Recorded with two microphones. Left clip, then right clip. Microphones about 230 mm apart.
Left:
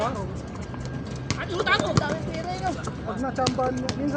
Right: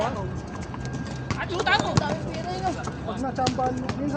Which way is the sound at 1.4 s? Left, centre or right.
Centre.